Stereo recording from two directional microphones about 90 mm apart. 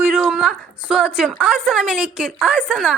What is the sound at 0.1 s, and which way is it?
A woman's voice, 10° right (ahead or behind).